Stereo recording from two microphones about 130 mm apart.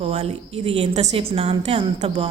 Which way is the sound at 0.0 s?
55° right (ahead or behind).